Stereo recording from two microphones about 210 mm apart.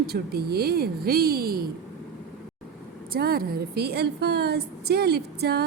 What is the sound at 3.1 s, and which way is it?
Speech, 45° right (ahead or behind).